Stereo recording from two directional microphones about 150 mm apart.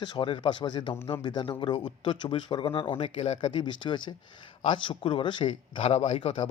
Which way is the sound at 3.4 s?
30° left (ahead or behind).